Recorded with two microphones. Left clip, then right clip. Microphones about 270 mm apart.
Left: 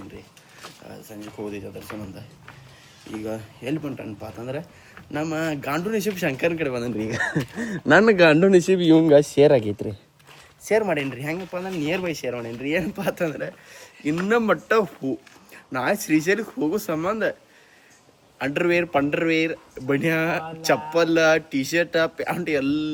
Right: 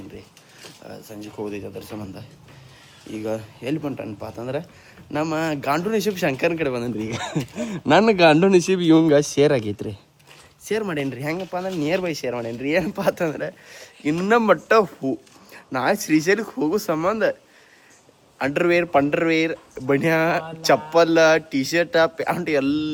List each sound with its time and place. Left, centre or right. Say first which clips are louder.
0.9 s speech: right 4 dB; centre
8.8 s speech: right 1 dB; centre
9.0 s speech: left 2 dB; centre
18.3 s speech: right 2 dB; centre